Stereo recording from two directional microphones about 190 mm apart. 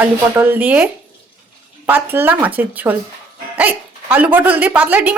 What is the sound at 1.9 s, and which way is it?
Speech, 10° right (ahead or behind).